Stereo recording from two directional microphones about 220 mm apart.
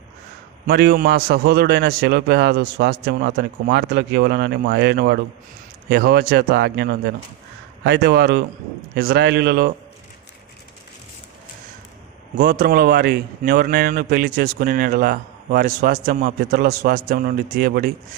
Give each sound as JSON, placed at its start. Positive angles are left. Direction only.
{"t": 0.7, "sound": "a man's voice", "side_deg": -45}
{"t": 12.4, "sound": "a man's voice", "side_deg": -45}